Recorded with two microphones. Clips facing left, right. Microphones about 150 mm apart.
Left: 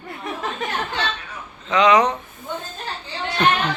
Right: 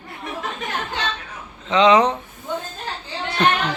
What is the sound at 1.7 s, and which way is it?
Speech, 25° right (ahead or behind).